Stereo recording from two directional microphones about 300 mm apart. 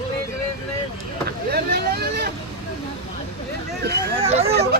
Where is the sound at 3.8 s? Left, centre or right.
Right.